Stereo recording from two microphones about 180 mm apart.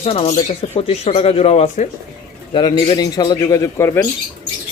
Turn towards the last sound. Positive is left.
turn(degrees=15)  # may be behind; listen again after turning